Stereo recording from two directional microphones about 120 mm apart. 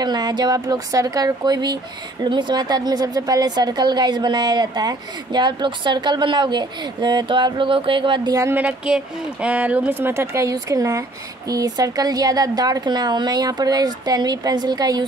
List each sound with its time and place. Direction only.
0.0 s speech: 35° right (ahead or behind)
8.4 s speech: 15° right (ahead or behind); by 15.0 s 35° right (ahead or behind)